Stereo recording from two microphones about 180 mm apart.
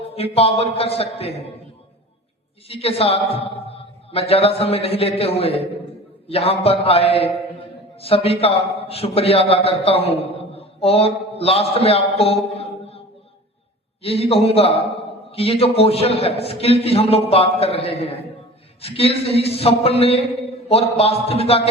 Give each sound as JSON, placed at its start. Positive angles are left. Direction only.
{"t": 0.2, "sound": "a man's voice", "side_deg": 35}
{"t": 2.6, "sound": "a man's voice", "side_deg": 35}
{"t": 14.0, "sound": "a man's voice", "side_deg": 30}